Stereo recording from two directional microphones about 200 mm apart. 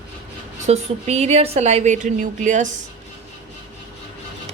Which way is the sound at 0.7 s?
35° right (ahead or behind).